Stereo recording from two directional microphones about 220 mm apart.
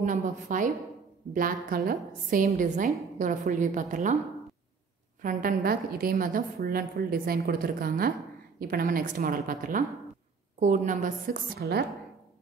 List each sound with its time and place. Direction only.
0.0 s a woman's voice: 35° right (ahead or behind)
5.2 s a woman's voice: 40° right (ahead or behind)